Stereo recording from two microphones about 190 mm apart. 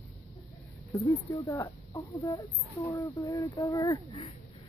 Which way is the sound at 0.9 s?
15° left (ahead or behind).